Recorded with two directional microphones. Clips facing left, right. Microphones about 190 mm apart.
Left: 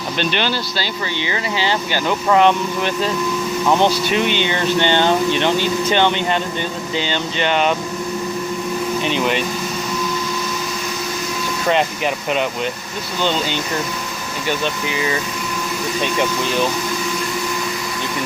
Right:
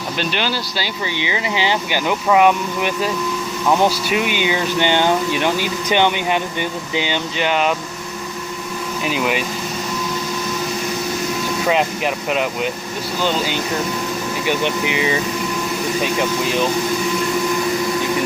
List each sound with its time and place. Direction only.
0.2 s speech: 5° right (ahead or behind)
9.0 s speech: 5° right (ahead or behind)
11.7 s speech: centre (ahead or behind); by 15.1 s 20° right (ahead or behind)